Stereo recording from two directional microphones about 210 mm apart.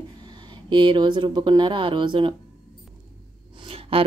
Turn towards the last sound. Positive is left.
turn(degrees=-25)  # may be behind; listen again after turning